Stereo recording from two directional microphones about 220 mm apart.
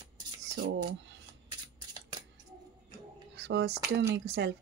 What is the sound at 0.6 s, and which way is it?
Speech, 50° right (ahead or behind).